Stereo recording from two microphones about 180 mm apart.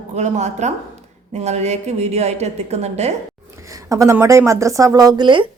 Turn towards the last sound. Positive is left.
turn(degrees=-25)  # may be behind; listen again after turning